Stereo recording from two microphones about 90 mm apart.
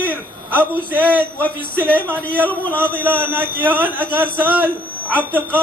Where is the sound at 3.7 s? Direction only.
15° left (ahead or behind).